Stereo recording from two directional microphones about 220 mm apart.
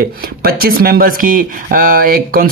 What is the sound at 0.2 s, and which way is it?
Speech, 45° right (ahead or behind).